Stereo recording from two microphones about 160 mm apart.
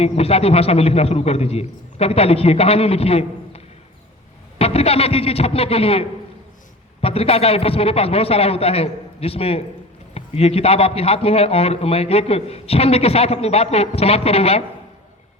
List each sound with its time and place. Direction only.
0.0 s a man's voice: 40° left (ahead or behind)